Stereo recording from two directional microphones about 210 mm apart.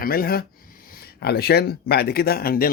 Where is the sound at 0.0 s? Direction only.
45° left (ahead or behind).